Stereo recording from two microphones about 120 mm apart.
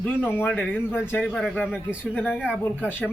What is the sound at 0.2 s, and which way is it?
Speech, 15° left (ahead or behind).